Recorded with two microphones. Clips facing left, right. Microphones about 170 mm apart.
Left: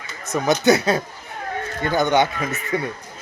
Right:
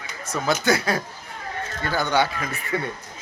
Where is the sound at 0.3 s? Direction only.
20° left (ahead or behind).